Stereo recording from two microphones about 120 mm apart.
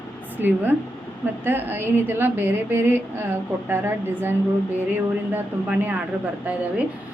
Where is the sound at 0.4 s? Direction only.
15° right (ahead or behind).